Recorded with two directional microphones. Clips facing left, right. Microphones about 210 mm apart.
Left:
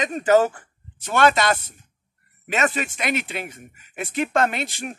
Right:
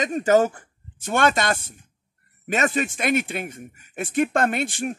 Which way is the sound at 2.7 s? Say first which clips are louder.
Right 4 dB; 45° right (ahead or behind).